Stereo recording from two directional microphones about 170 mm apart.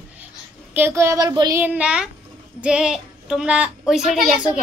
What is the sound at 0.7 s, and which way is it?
Child singing, 15° right (ahead or behind).